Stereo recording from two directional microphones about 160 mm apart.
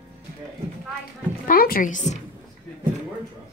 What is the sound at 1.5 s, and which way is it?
Speech, 60° left (ahead or behind).